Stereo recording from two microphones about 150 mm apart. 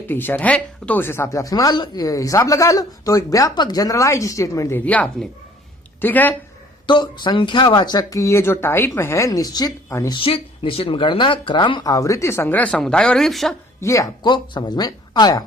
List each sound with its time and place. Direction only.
0.1 s speech: 15° left (ahead or behind)
4.9 s speech: 10° left (ahead or behind)
6.8 s speech: 30° left (ahead or behind)
10.2 s speech: 35° left (ahead or behind); by 13.6 s centre (ahead or behind)
13.8 s speech: 20° left (ahead or behind)